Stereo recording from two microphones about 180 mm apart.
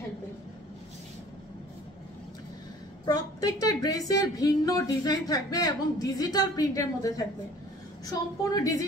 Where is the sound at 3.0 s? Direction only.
20° left (ahead or behind).